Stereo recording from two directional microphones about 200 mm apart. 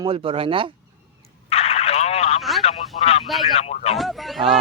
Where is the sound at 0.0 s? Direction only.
25° right (ahead or behind).